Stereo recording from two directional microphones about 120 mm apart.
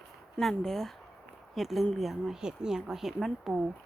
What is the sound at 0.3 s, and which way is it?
Speech, 5° left (ahead or behind).